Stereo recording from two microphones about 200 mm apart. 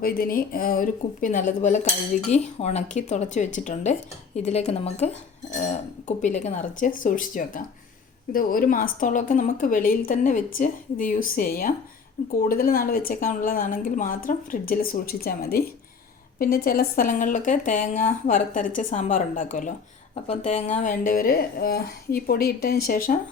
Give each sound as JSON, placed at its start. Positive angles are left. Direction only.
{"t": 0.0, "sound": "a woman's voice", "side_deg": 50}